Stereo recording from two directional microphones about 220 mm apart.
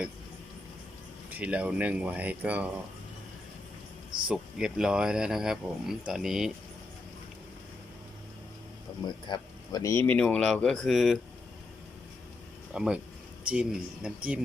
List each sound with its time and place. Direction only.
1.3 s speech: 5° right (ahead or behind)
4.3 s speech: 5° right (ahead or behind)
8.9 s music: 20° left (ahead or behind)
9.2 s speech: 20° left (ahead or behind); by 11.2 s centre (ahead or behind)
12.7 s speech: 5° right (ahead or behind)